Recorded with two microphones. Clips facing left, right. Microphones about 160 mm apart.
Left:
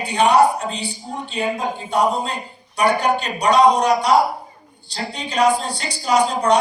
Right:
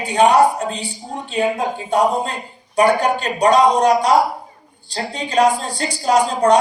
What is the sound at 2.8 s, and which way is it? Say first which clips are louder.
A woman's voice: right 3 dB; 45° right (ahead or behind).